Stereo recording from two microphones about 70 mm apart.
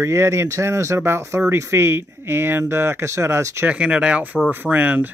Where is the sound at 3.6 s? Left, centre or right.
Centre.